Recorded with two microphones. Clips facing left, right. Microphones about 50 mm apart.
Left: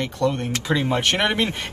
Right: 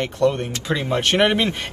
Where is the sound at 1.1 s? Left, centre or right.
Centre.